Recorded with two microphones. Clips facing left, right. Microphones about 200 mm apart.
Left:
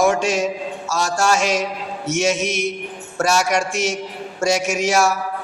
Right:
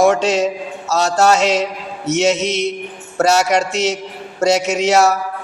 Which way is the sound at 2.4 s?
20° right (ahead or behind).